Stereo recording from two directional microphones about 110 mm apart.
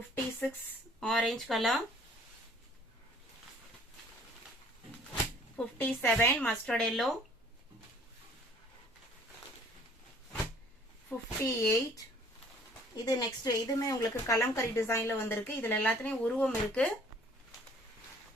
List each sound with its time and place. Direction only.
0.1 s speech: 15° left (ahead or behind)
1.0 s speech: 5° left (ahead or behind)
5.5 s speech: 15° left (ahead or behind)
6.4 s speech: 5° left (ahead or behind)
11.1 s speech: 15° left (ahead or behind)
11.4 s speech: 30° left (ahead or behind)
13.1 s speech: 35° left (ahead or behind); by 16.9 s 10° left (ahead or behind)